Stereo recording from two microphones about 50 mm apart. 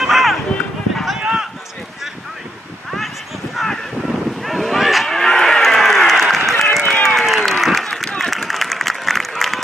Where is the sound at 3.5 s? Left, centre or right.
Centre.